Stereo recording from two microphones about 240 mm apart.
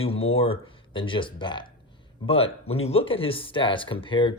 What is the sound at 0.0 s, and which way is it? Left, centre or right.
Speech, left.